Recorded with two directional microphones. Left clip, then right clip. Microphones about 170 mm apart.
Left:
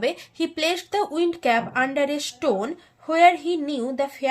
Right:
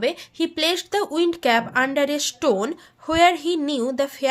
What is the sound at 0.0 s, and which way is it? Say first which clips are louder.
A woman's voice: right 2 dB; 15° right (ahead or behind).